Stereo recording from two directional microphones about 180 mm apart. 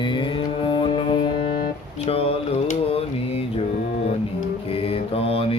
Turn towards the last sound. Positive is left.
turn(degrees=30)  # may be behind; listen again after turning